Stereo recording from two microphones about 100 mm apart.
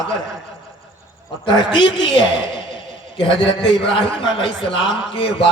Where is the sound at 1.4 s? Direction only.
55° left (ahead or behind).